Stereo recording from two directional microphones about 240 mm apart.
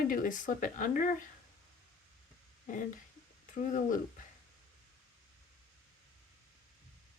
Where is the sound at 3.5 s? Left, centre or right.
Left.